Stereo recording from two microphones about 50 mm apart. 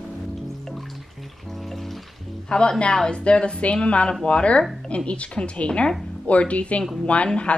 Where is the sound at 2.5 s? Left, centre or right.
Centre.